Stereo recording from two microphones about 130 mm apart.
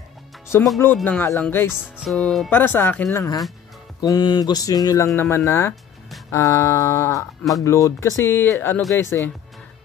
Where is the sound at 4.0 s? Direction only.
30° left (ahead or behind).